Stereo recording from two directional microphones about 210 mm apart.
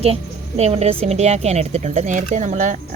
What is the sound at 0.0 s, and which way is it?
Speech, 30° right (ahead or behind).